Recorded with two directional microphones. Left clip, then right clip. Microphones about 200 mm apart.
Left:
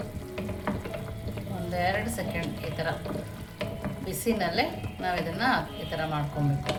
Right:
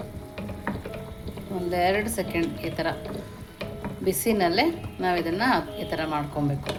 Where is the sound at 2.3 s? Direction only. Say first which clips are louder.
Right 5 dB; 40° right (ahead or behind).